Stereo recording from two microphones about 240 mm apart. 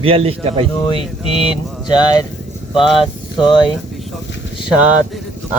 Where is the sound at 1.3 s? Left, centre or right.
Left.